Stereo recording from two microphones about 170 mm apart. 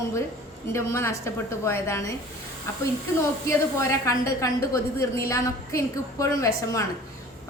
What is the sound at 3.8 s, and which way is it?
A woman's voice, 15° left (ahead or behind).